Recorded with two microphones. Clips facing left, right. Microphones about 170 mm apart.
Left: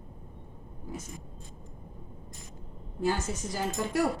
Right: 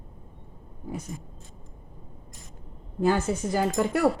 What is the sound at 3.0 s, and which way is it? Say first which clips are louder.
A woman's voice: right 6 dB; 55° right (ahead or behind).